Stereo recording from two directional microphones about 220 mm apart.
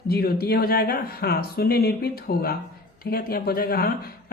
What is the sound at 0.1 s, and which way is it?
Speech, 45° left (ahead or behind).